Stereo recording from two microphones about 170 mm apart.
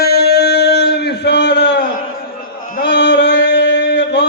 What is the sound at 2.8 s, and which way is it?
Mantra, 85° left.